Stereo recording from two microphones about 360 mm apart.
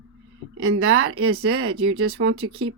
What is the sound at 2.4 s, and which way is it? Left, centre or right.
Speech, centre.